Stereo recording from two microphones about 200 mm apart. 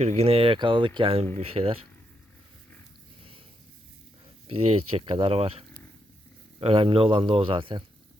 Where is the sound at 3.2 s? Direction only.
25° right (ahead or behind).